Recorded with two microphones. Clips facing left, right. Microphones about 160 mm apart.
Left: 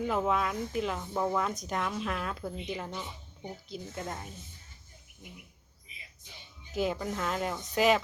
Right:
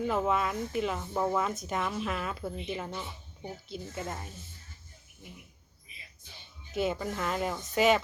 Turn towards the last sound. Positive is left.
turn(degrees=0)  # may be behind; listen again after turning